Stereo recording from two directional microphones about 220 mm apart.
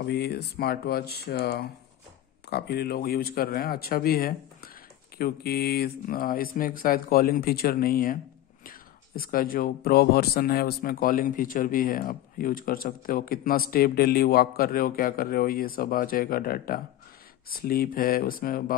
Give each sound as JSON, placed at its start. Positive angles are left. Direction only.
{"t": 0.0, "sound": "speech", "side_deg": 45}